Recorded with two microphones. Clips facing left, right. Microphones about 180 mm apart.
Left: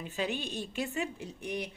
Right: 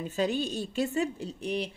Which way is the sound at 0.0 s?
40° right (ahead or behind).